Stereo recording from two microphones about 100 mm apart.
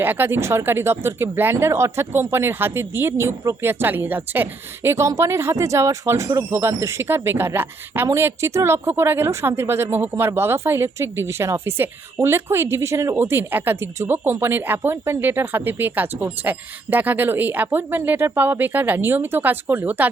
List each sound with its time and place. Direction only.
0.0 s speech: 20° right (ahead or behind)